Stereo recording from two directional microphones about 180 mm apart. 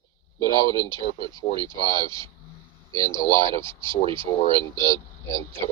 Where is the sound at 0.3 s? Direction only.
15° left (ahead or behind).